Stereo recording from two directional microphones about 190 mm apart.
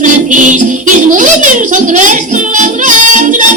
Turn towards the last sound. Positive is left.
turn(degrees=-40)  # may be behind; listen again after turning